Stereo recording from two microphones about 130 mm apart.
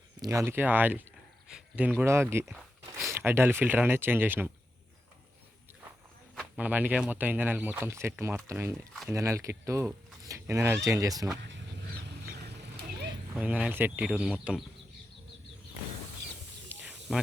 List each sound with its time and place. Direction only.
0.2 s speech: 25° right (ahead or behind)
6.6 s speech: 10° right (ahead or behind)
13.3 s speech: 10° right (ahead or behind)
16.6 s a sound: 5° right (ahead or behind)